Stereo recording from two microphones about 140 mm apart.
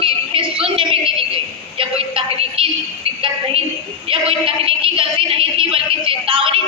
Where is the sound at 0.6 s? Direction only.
40° right (ahead or behind).